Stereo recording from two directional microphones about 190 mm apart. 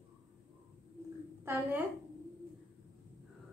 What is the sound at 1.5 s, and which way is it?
Speech, 10° right (ahead or behind).